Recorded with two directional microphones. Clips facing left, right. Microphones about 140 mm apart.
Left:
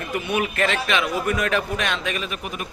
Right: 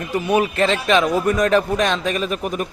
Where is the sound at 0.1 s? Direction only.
35° right (ahead or behind).